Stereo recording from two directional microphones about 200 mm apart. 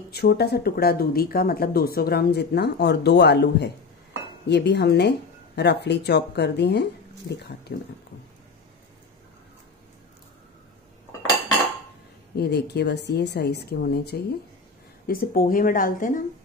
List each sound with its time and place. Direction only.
0.1 s speech: 55° left (ahead or behind)
12.4 s speech: 55° left (ahead or behind)